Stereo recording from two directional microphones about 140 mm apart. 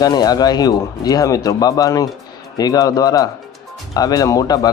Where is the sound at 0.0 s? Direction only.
25° left (ahead or behind).